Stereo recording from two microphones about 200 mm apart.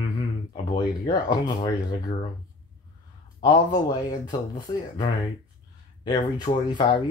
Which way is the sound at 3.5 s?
20° left (ahead or behind).